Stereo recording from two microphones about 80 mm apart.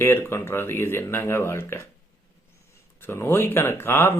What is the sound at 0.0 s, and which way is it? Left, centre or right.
Speech, left.